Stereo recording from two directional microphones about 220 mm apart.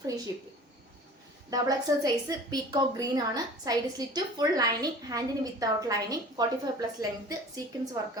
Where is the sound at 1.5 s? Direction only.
15° right (ahead or behind).